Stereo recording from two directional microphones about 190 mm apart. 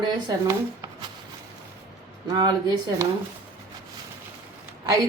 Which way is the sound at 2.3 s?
25° right (ahead or behind).